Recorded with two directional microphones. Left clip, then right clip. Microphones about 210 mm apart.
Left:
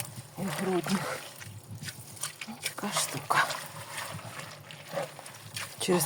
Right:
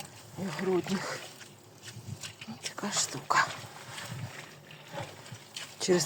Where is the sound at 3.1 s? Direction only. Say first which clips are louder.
Even; 15° left (ahead or behind).